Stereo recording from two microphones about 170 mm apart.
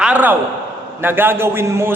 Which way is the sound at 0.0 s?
10° right (ahead or behind).